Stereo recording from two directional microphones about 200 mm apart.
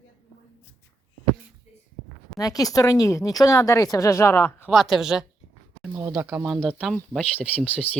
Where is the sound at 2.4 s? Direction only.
20° left (ahead or behind).